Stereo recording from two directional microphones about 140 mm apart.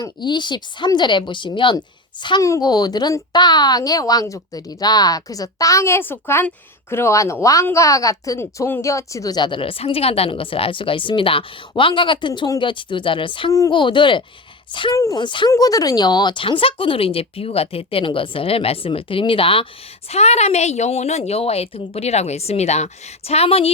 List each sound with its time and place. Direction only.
0.0 s a woman's voice: 35° left (ahead or behind)
14.9 s a woman's voice: 20° left (ahead or behind)
15.2 s speech: 35° left (ahead or behind)
20.1 s a woman's voice: 50° left (ahead or behind)